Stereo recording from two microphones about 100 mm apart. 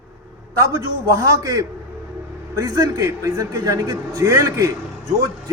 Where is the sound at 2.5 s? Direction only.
35° right (ahead or behind).